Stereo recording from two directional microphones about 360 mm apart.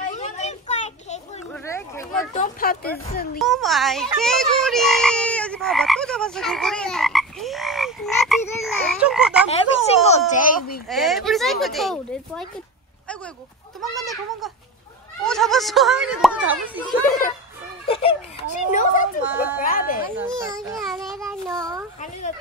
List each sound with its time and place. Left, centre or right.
0.1 s children playing: centre
1.5 s a sound: centre
2.3 s speech: left
3.3 s frog: centre
9.5 s speech: centre
10.9 s speech: centre
13.7 s speech: centre
17.8 s a child's voice: centre
19.3 s speech: centre
19.7 s a child's voice: left
20.2 s speech: centre
20.7 s a sound: centre